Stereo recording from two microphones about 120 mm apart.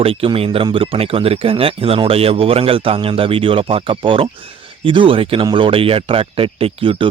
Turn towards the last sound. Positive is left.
turn(degrees=-50)  # may be behind; listen again after turning